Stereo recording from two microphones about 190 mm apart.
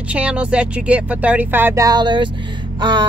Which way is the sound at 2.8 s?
25° right (ahead or behind).